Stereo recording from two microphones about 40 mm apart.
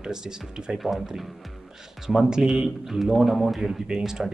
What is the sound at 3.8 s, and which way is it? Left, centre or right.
Speech, centre.